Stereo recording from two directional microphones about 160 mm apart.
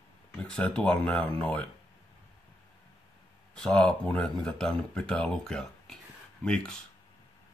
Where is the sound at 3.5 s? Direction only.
5° left (ahead or behind).